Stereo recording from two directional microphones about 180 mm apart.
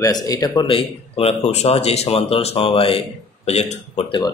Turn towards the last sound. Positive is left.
turn(degrees=30)  # may be behind; listen again after turning